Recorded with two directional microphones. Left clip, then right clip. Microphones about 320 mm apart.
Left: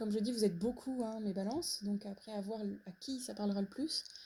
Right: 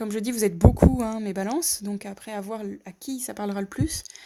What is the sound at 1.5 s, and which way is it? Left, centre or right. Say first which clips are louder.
Speech: right 12 dB; right.